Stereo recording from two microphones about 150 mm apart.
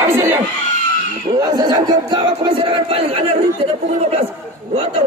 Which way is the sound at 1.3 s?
25° right (ahead or behind).